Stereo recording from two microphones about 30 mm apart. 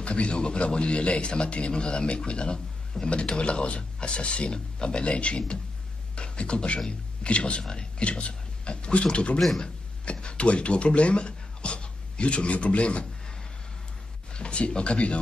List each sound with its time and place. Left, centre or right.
0.0 s a man's voice: left
14.3 s a sound: left
14.8 s a man's voice: left